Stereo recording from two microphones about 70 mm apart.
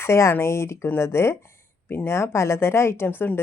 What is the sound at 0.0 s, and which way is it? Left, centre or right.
A woman's voice, left.